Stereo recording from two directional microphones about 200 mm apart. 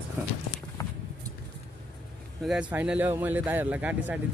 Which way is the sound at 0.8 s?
15° left (ahead or behind).